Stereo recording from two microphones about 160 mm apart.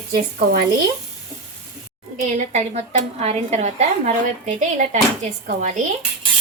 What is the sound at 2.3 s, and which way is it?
A woman's voice, 45° right (ahead or behind).